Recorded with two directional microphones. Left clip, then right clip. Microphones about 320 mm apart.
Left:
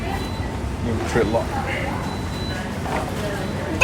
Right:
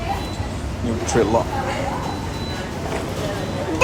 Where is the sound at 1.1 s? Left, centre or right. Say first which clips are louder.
Right 2 dB; centre.